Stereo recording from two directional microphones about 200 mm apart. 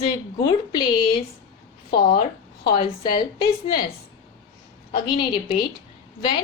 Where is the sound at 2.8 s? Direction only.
20° left (ahead or behind).